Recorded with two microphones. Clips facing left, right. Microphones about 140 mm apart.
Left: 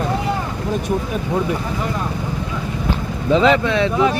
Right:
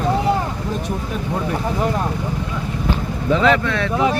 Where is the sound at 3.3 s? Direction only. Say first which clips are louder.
Left 3 dB; 20° left (ahead or behind).